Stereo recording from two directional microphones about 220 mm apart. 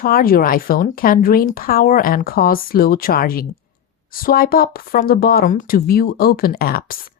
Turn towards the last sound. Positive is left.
turn(degrees=40)  # may be behind; listen again after turning